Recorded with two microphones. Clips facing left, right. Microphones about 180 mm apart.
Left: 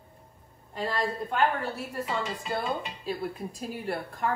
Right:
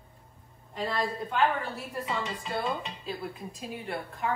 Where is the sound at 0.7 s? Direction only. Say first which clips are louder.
Left 1 dB; centre (ahead or behind).